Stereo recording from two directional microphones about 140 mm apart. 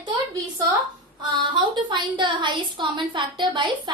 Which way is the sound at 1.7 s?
35° right (ahead or behind).